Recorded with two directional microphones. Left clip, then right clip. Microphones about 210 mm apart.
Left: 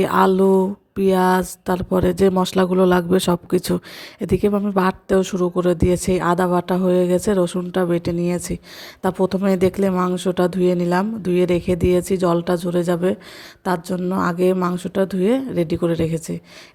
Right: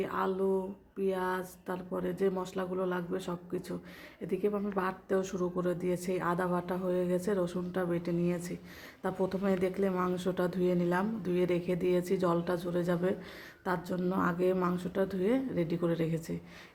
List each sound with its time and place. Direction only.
0.0 s speech: 50° left (ahead or behind)